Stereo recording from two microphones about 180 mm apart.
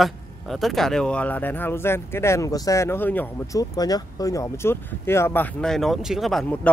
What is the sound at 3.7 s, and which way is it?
Speech, 20° left (ahead or behind).